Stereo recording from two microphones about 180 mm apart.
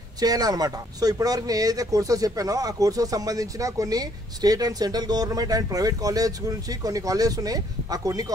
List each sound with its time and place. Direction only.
0.2 s speech: 20° right (ahead or behind)